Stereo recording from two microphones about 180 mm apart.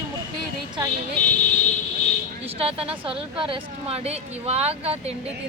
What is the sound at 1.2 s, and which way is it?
Vehicle, 45° left (ahead or behind).